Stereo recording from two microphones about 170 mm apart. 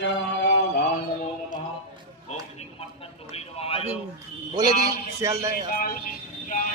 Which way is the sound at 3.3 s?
35° left (ahead or behind).